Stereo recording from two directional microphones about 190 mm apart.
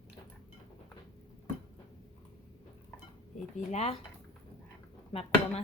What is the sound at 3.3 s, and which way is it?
Dishes, 35° left (ahead or behind).